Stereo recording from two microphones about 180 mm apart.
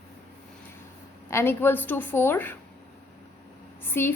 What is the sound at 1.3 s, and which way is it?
A woman's voice, 15° left (ahead or behind).